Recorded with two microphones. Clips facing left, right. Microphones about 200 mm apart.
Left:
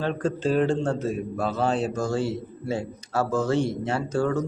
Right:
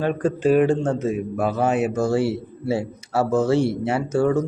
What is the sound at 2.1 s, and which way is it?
Speech, 75° right (ahead or behind).